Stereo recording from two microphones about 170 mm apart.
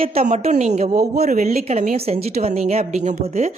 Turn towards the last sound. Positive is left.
turn(degrees=-40)  # may be behind; listen again after turning